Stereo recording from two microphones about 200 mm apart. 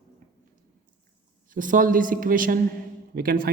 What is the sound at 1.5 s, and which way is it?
A man's voice, 40° right (ahead or behind).